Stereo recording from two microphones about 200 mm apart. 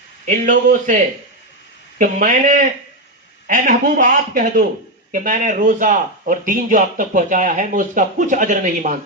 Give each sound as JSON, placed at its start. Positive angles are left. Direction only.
{"t": 0.3, "sound": "speech", "side_deg": -40}